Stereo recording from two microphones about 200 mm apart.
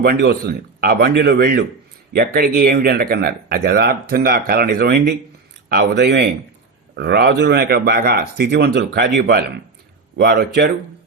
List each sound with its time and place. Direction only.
0.0 s speech: 55° right (ahead or behind)